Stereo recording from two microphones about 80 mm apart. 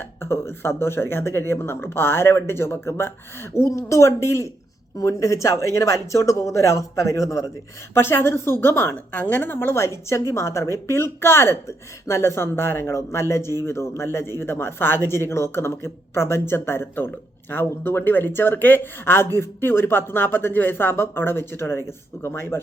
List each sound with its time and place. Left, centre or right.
0.0 s speech: left
7.9 s speech: left